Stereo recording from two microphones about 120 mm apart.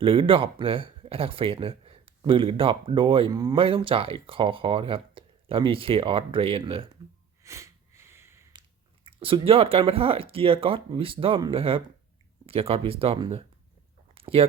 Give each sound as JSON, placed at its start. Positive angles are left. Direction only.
{"t": 0.0, "sound": "speech", "side_deg": -50}
{"t": 3.3, "sound": "speech", "side_deg": -30}
{"t": 3.6, "sound": "speech", "side_deg": -45}
{"t": 7.4, "sound": "sniff", "side_deg": -25}
{"t": 9.0, "sound": "speech", "side_deg": -50}
{"t": 14.1, "sound": "a sound", "side_deg": -50}